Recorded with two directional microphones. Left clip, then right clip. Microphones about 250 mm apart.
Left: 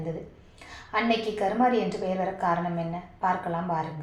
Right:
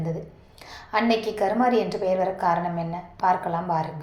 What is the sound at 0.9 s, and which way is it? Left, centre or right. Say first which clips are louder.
A woman's voice: right 3 dB; right.